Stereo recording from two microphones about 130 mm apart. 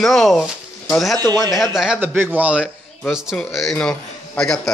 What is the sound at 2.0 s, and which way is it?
Speech, 15° right (ahead or behind).